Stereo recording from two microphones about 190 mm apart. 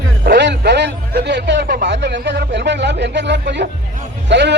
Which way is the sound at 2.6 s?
65° right (ahead or behind).